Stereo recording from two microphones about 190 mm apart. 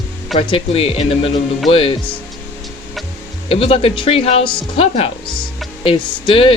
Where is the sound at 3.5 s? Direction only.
30° left (ahead or behind).